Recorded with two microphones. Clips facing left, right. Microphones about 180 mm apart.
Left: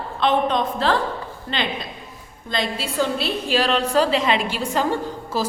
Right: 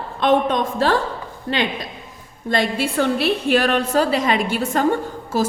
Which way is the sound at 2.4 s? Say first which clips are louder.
Right 5 dB; 55° right (ahead or behind).